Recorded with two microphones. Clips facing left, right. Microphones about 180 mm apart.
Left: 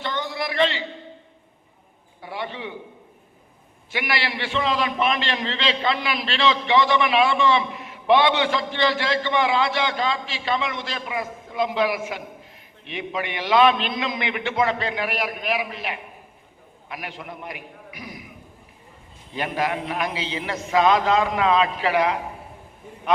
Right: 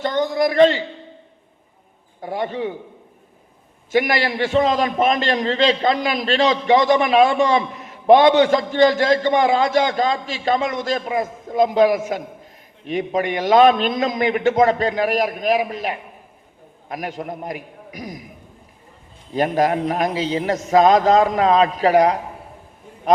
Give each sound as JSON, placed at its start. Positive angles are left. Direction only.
{"t": 0.0, "sound": "a man's voice", "side_deg": -45}
{"t": 2.2, "sound": "a man's voice", "side_deg": -45}
{"t": 3.9, "sound": "a man's voice", "side_deg": -45}
{"t": 19.3, "sound": "a man's voice", "side_deg": -40}